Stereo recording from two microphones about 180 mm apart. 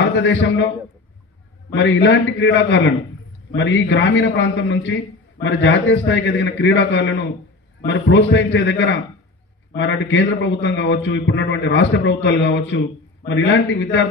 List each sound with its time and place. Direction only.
0.0 s a man's voice: 90° left
1.7 s a man's voice: 85° left